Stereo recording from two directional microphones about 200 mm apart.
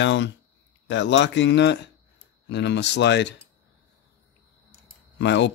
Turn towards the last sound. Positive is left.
turn(degrees=65)  # may be behind; listen again after turning